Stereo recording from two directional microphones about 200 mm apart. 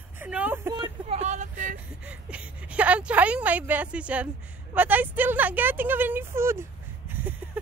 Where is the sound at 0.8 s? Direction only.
30° right (ahead or behind).